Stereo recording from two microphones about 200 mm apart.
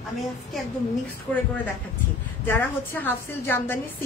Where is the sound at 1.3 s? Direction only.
5° left (ahead or behind).